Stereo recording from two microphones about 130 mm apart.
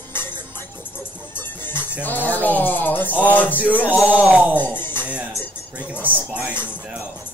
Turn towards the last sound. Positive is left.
turn(degrees=15)  # may be behind; listen again after turning